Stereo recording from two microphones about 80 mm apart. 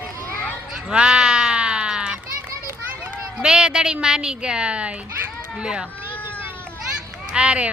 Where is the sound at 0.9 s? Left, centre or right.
Centre.